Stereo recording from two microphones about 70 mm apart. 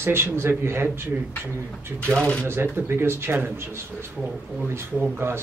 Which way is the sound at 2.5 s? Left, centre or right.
Right.